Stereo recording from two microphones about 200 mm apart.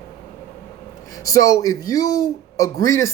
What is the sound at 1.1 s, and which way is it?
Speech, 15° left (ahead or behind).